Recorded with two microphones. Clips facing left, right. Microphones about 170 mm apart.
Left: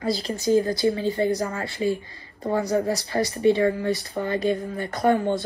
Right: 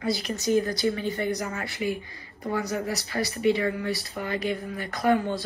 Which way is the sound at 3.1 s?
35° left (ahead or behind).